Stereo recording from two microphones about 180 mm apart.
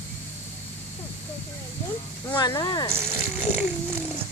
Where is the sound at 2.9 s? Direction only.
15° right (ahead or behind).